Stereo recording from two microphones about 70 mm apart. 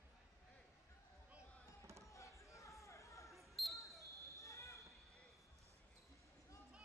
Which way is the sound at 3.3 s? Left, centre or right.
Centre.